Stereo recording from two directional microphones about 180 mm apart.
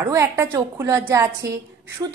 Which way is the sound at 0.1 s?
15° right (ahead or behind).